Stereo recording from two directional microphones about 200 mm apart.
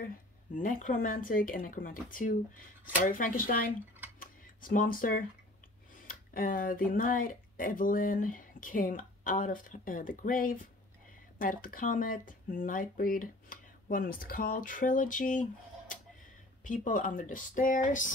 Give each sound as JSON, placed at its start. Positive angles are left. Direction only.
{"t": 0.6, "sound": "speech", "side_deg": 40}
{"t": 4.2, "sound": "a sound", "side_deg": 45}
{"t": 6.0, "sound": "speech", "side_deg": 45}
{"t": 16.6, "sound": "speech", "side_deg": 40}